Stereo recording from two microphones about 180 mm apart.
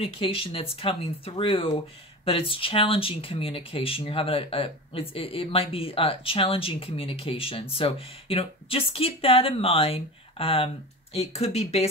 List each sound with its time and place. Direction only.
0.0 s speech: 30° left (ahead or behind)